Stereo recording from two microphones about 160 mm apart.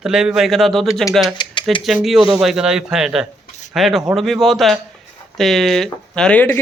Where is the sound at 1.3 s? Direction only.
30° left (ahead or behind).